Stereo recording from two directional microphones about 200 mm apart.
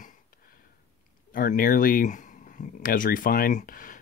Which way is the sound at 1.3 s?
45° left (ahead or behind).